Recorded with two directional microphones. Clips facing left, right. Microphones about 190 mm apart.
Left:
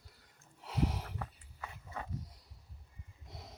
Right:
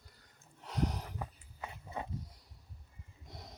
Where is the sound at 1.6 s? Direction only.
20° right (ahead or behind).